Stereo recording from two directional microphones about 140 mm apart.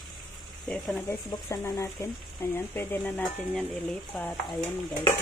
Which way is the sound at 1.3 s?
25° left (ahead or behind).